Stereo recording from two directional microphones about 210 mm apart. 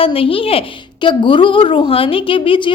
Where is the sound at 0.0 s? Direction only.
25° left (ahead or behind).